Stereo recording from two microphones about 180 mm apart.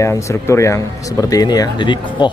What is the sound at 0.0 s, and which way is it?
Speech, 15° left (ahead or behind).